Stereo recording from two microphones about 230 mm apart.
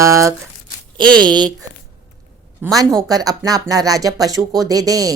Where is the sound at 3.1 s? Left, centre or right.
Centre.